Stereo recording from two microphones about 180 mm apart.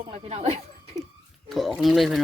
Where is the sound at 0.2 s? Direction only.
35° right (ahead or behind).